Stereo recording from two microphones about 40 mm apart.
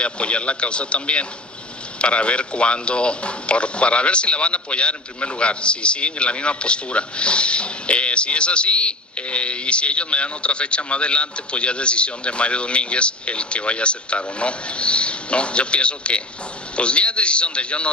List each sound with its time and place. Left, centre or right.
0.0 s speech: left